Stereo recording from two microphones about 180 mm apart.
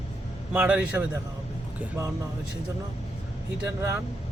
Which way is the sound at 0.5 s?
10° right (ahead or behind).